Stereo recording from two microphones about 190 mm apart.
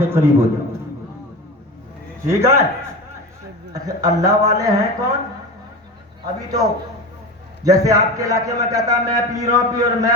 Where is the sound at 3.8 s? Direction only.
20° right (ahead or behind).